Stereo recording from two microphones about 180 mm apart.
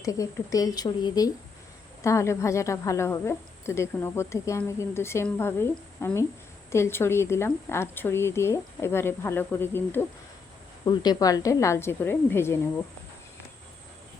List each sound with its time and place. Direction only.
0.0 s a woman's voice: 20° left (ahead or behind)
10.8 s a woman's voice: 20° left (ahead or behind)